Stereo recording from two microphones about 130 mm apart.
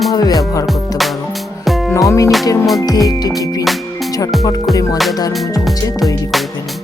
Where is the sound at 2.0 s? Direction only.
25° left (ahead or behind).